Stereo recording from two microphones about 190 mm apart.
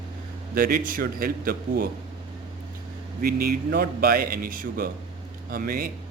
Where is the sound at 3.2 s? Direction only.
55° right (ahead or behind).